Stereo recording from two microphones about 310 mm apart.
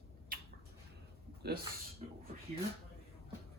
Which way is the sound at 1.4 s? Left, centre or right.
Right.